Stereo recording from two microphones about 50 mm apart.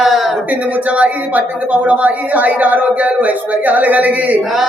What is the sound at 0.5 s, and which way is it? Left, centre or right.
Music, right.